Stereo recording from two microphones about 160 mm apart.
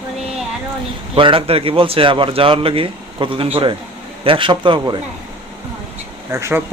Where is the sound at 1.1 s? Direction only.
35° right (ahead or behind).